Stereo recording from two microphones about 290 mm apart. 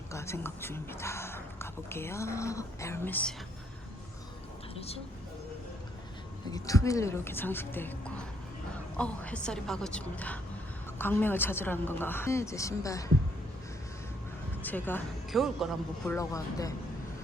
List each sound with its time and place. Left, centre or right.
0.1 s speech: centre
4.7 s speech: left
6.5 s a woman's voice: centre
14.6 s speech: centre
16.1 s speech: centre